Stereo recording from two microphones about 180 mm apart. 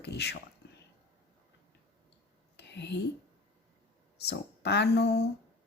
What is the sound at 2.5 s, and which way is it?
Whispering, 70° left (ahead or behind).